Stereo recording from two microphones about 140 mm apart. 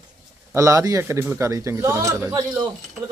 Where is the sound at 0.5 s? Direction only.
20° right (ahead or behind).